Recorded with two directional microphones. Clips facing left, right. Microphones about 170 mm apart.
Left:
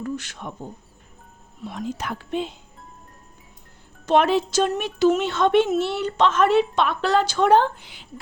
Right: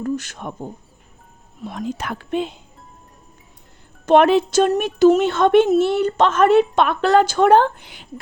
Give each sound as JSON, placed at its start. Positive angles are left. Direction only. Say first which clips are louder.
{"t": 0.0, "sound": "a woman's voice", "louder": "right 5 dB", "side_deg": -45}
{"t": 4.0, "sound": "speech", "louder": "right 5 dB", "side_deg": -55}
{"t": 4.7, "sound": "a woman's voice", "louder": "right 7 dB", "side_deg": -45}